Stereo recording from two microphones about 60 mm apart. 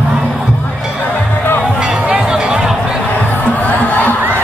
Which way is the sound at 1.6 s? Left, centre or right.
Centre.